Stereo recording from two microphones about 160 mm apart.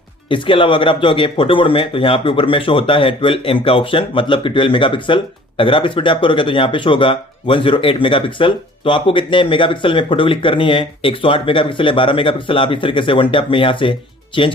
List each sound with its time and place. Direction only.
0.3 s speech: 30° left (ahead or behind)